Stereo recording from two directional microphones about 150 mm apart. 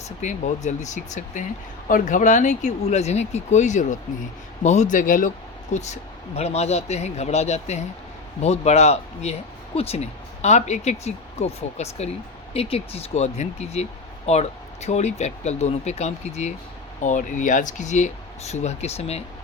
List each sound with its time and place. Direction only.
0.2 s a man's voice: 55° left (ahead or behind)
5.7 s speech: 50° left (ahead or behind)
17.0 s speech: 55° left (ahead or behind)